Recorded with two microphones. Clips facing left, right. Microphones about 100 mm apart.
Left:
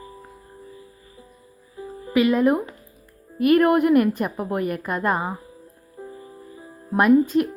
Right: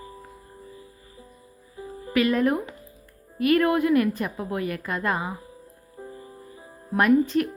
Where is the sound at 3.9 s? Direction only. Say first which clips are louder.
Left 4 dB; 50° left (ahead or behind).